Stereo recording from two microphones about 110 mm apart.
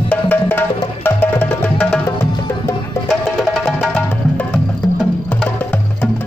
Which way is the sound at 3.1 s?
Centre (ahead or behind).